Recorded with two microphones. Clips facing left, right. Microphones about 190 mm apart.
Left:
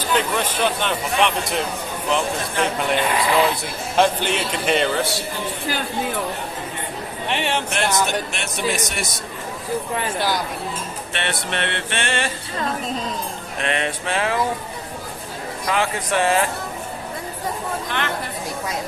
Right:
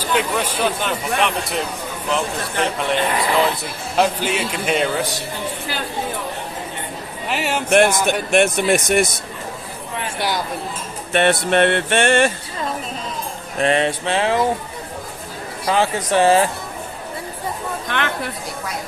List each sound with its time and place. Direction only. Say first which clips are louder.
0.0 s speech: right 1 dB; 10° right (ahead or behind)
7.3 s speech: right 1 dB; 5° right (ahead or behind)
7.7 s speech: right 11 dB; 55° right (ahead or behind)
10.2 s a sound: right 2 dB; 20° right (ahead or behind)
11.1 s speech: right 11 dB; 50° right (ahead or behind)
13.6 s a sound: right 7 dB; 35° right (ahead or behind)
15.6 s speech: right 4 dB; 30° right (ahead or behind)